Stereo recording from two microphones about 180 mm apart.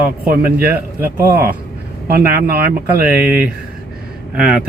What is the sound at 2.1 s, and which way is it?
Speech, 55° right (ahead or behind).